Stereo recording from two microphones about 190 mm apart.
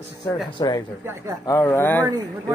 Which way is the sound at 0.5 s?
20° left (ahead or behind).